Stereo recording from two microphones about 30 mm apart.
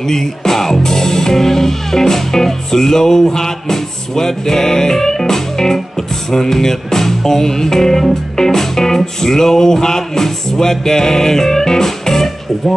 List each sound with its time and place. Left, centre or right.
0.1 s speech: centre
6.3 s music: centre